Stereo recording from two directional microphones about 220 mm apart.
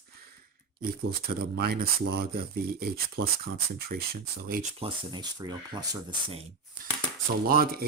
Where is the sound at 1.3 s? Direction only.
45° right (ahead or behind).